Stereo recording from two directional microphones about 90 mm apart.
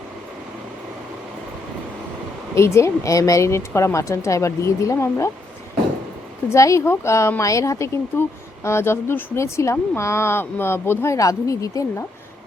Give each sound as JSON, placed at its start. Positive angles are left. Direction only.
{"t": 2.6, "sound": "speech", "side_deg": 30}
{"t": 6.5, "sound": "speech", "side_deg": 35}